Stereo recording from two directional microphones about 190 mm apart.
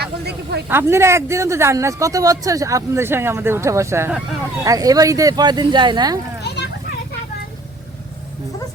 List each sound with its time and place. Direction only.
0.0 s speech: 60° right (ahead or behind)
0.7 s speech: 15° right (ahead or behind)